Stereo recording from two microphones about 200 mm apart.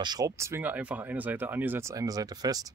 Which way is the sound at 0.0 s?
20° right (ahead or behind).